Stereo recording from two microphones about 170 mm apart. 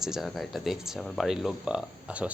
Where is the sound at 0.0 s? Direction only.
Centre (ahead or behind).